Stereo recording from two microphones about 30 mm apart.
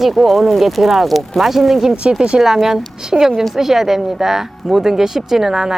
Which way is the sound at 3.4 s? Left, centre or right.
Centre.